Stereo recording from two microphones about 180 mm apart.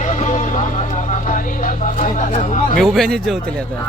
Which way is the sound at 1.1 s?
45° left (ahead or behind).